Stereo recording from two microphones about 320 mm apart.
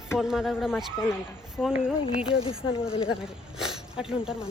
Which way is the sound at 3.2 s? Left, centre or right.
Centre.